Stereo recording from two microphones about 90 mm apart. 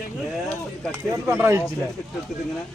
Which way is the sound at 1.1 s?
20° right (ahead or behind).